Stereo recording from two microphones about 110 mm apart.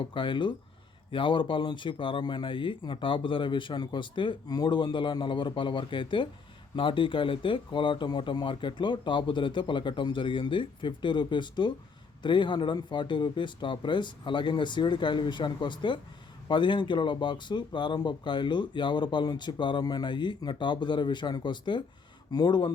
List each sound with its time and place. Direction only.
0.0 s speech: 50° left (ahead or behind)